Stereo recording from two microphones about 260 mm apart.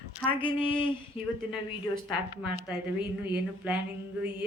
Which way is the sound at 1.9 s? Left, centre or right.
Centre.